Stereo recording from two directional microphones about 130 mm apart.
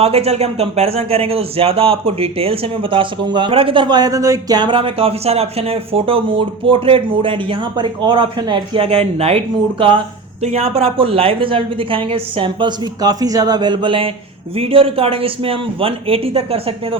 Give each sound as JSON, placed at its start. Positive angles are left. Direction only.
{"t": 0.0, "sound": "speech", "side_deg": -50}
{"t": 10.4, "sound": "speech", "side_deg": -50}